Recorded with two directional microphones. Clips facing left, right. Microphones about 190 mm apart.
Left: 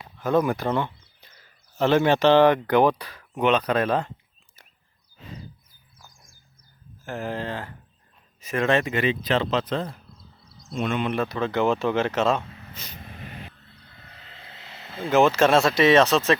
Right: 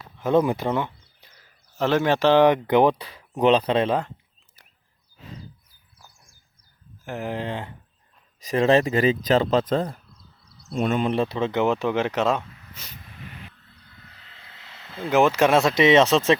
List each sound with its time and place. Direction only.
0.2 s speech: 20° right (ahead or behind)
0.8 s a sound: 10° right (ahead or behind)
1.8 s speech: 5° right (ahead or behind); by 3.1 s 20° right (ahead or behind)
3.3 s speech: 30° right (ahead or behind)
7.0 s speech: 15° right (ahead or behind)
8.4 s a man's voice: 35° right (ahead or behind); by 12.4 s 15° right (ahead or behind)
13.0 s vehicle: 55° left (ahead or behind)
13.2 s vehicle: 35° left (ahead or behind)
15.1 s speech: 15° right (ahead or behind)